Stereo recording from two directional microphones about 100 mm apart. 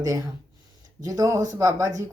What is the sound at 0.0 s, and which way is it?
Speech, 35° right (ahead or behind).